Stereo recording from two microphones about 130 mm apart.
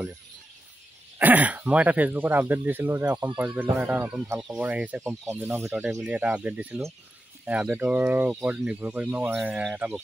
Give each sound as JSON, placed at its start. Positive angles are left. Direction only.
{"t": 1.1, "sound": "speech", "side_deg": -10}
{"t": 5.7, "sound": "speech", "side_deg": -5}